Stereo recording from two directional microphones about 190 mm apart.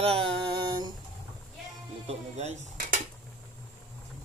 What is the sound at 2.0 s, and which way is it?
Dishes, 35° right (ahead or behind).